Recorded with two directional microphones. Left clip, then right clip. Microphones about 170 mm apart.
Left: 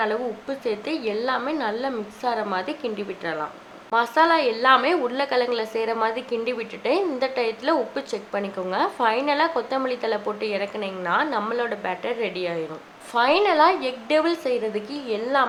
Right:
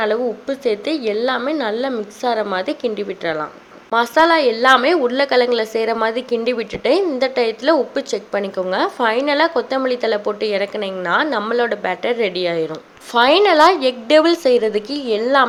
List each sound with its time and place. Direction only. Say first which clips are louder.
0.0 s a woman's voice: right 6 dB; 30° right (ahead or behind)